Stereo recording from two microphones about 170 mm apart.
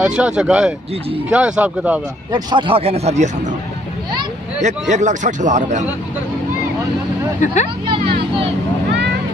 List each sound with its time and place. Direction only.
0.0 s speech: 5° right (ahead or behind)
2.3 s a man's voice: 30° right (ahead or behind)
4.6 s a man's voice: 45° right (ahead or behind)
7.3 s speech: 50° left (ahead or behind)
7.8 s vehicle: 30° right (ahead or behind)